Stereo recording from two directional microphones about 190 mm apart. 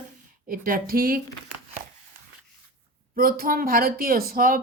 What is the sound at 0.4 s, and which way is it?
Speech, 50° right (ahead or behind).